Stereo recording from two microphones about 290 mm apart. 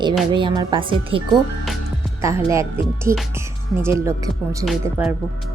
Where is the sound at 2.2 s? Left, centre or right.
Centre.